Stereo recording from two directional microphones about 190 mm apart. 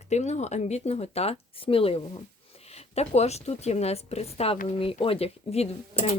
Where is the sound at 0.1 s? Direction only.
35° left (ahead or behind).